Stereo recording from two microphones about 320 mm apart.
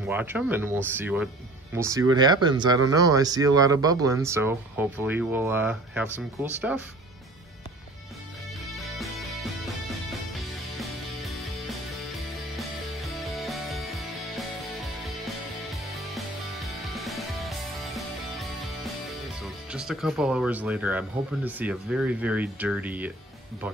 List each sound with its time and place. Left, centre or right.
0.0 s speech: centre
8.7 s music: centre